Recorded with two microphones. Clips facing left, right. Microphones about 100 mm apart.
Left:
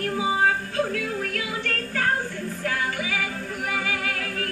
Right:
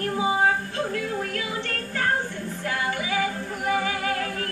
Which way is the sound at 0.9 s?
30° right (ahead or behind).